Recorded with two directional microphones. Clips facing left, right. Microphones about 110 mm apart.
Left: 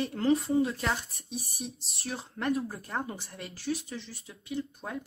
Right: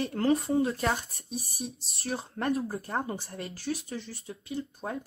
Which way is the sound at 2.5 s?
30° right (ahead or behind).